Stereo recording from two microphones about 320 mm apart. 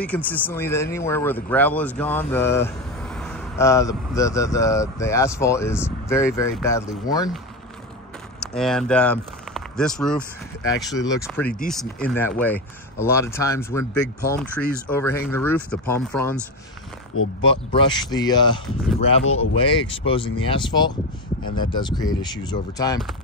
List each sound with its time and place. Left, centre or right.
0.0 s speech: centre
8.5 s speech: centre
17.1 s speech: left
17.6 s speech: centre